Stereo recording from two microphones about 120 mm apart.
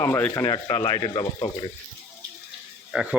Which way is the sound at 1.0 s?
40° left (ahead or behind).